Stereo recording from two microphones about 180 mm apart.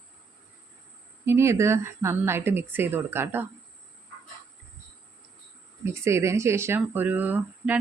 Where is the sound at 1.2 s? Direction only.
15° right (ahead or behind).